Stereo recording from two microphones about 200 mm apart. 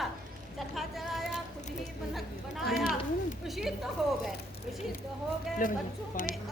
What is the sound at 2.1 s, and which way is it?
A woman's voice, centre (ahead or behind).